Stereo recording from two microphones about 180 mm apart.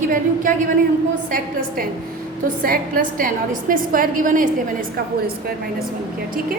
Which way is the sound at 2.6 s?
50° right (ahead or behind).